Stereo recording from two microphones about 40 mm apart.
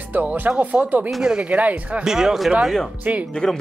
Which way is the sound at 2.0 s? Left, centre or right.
Centre.